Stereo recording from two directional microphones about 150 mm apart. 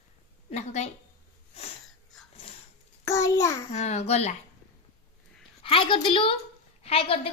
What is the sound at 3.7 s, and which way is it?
Speech, 45° left (ahead or behind).